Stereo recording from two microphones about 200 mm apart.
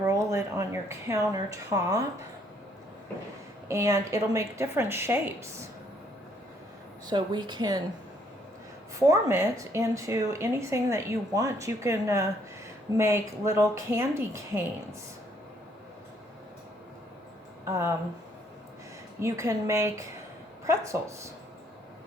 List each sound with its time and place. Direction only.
0.0 s speech: 15° right (ahead or behind)
3.7 s a woman's voice: 15° right (ahead or behind)
7.1 s a woman's voice: 20° right (ahead or behind)
9.0 s a woman's voice: 15° right (ahead or behind)
17.7 s a woman's voice: 15° right (ahead or behind)
19.2 s a woman's voice: 15° right (ahead or behind)